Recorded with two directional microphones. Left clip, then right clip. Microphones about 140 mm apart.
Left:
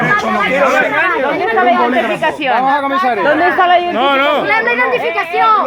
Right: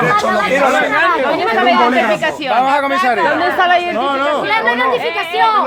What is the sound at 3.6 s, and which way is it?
Speech, 25° left (ahead or behind).